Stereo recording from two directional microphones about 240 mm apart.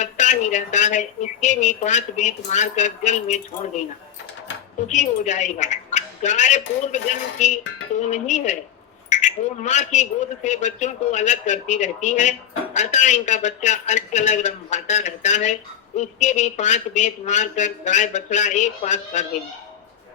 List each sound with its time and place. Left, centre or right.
0.0 s a woman's voice: left
4.9 s a woman's voice: left